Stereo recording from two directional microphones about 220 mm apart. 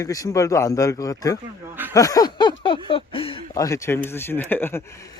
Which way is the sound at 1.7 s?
10° right (ahead or behind).